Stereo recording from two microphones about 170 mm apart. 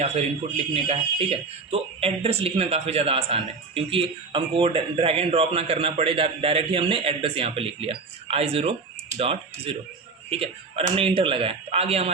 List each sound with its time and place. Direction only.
0.0 s a man's voice: 40° right (ahead or behind)